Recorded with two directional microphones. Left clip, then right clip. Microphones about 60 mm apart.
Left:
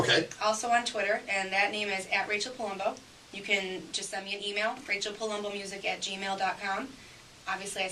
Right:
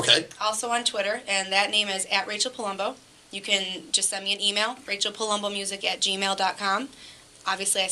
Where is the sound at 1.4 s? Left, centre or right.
Right.